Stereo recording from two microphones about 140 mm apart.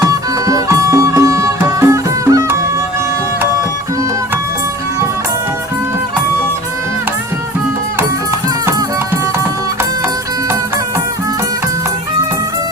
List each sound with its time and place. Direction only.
0.0 s music: 25° right (ahead or behind)